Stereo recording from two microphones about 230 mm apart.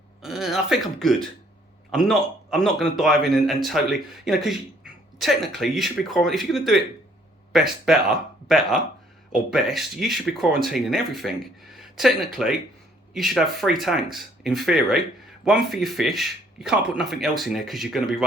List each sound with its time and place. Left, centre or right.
0.2 s a man's voice: centre